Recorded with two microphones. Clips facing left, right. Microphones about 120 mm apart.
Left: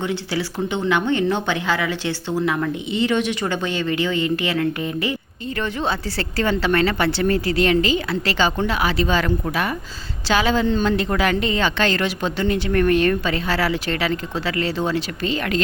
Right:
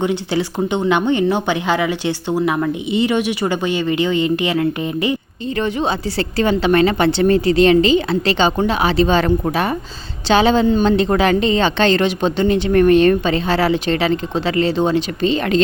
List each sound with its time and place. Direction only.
0.0 s a woman's voice: 20° right (ahead or behind)